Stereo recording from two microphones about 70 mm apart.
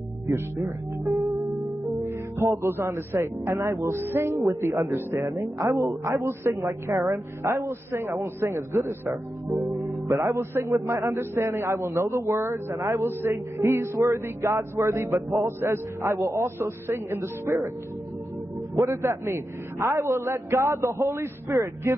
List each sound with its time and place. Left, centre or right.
0.3 s a man's voice: right
18.8 s a man's voice: right